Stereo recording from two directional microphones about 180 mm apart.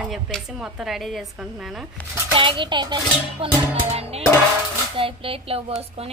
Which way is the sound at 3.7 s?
35° right (ahead or behind).